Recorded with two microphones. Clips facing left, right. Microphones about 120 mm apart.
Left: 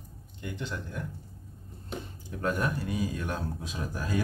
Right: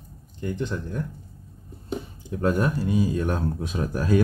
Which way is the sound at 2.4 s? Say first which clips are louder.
Right 7 dB; 35° right (ahead or behind).